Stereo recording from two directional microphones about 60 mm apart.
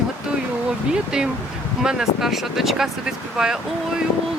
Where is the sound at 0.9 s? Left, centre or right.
Centre.